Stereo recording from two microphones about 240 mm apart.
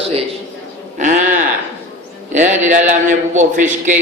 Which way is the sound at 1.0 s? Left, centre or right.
Right.